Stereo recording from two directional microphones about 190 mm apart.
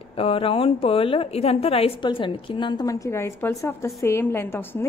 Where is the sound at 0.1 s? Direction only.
30° left (ahead or behind).